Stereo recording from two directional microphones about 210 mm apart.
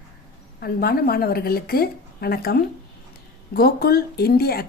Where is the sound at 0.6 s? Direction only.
45° left (ahead or behind).